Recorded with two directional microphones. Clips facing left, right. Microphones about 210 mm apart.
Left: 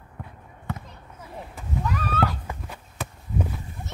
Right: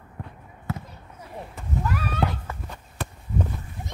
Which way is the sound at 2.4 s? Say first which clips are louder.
Even; 10° left (ahead or behind).